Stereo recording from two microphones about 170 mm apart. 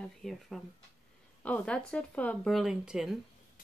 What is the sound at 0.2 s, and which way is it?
Speech, centre (ahead or behind).